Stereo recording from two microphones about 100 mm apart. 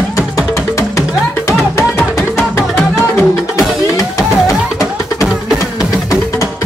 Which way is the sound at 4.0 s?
30° left (ahead or behind).